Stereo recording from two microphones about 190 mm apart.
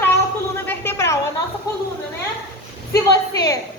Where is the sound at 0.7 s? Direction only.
15° left (ahead or behind).